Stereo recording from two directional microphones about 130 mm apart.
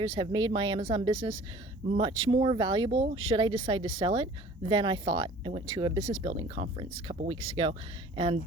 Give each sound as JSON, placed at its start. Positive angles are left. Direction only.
{"t": 0.0, "sound": "speech", "side_deg": -40}